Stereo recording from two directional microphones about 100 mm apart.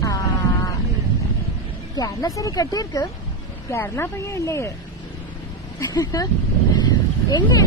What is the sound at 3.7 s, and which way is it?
Speech, 25° left (ahead or behind).